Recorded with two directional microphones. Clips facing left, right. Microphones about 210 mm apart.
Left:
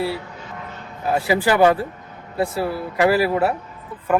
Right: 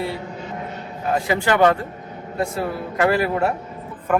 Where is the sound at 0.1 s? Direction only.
35° right (ahead or behind).